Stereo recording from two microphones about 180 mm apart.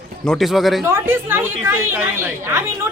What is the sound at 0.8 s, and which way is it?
A woman's voice, 10° right (ahead or behind).